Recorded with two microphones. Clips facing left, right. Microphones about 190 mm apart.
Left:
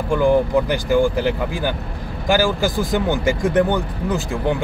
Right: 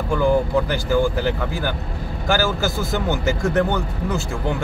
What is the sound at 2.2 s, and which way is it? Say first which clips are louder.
Speech: left 3 dB; 15° left (ahead or behind).